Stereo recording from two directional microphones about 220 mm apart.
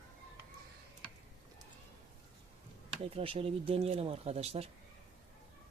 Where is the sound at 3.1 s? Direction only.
25° right (ahead or behind).